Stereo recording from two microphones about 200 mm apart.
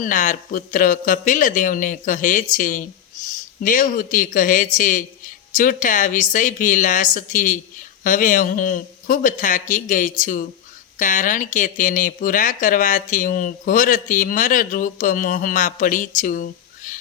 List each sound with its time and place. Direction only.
0.0 s speech: 40° left (ahead or behind)